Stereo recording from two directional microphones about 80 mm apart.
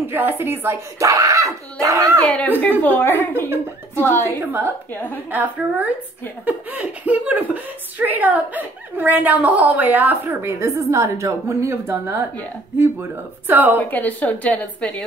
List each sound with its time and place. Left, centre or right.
0.0 s speech: right
0.9 s speech: right
2.2 s a woman's voice: centre
3.3 s a woman's voice: right
4.0 s a woman's voice: left
4.4 s speech: right
4.9 s a woman's voice: left
5.3 s speech: right
10.4 s a woman's voice: right
13.7 s a woman's voice: left